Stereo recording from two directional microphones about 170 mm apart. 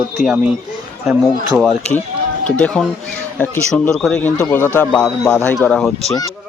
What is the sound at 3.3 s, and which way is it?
Speech, 10° left (ahead or behind).